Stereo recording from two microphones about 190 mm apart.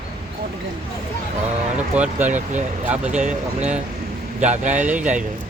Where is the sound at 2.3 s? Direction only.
40° right (ahead or behind).